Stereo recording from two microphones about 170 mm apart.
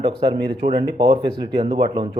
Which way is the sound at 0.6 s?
40° right (ahead or behind).